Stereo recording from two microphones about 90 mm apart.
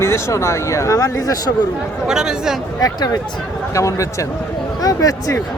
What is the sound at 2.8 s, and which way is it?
Speech, 45° left (ahead or behind).